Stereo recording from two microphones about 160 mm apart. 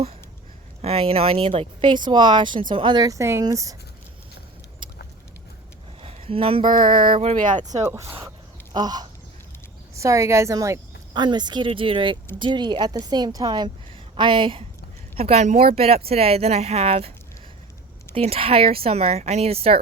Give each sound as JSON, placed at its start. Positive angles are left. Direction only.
{"t": 0.8, "sound": "speech", "side_deg": -40}
{"t": 6.0, "sound": "a sound", "side_deg": -35}
{"t": 7.2, "sound": "speech", "side_deg": -45}
{"t": 7.9, "sound": "speech", "side_deg": -20}
{"t": 18.1, "sound": "speech", "side_deg": -35}